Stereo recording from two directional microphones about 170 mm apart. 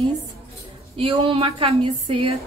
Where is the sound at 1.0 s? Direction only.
30° right (ahead or behind).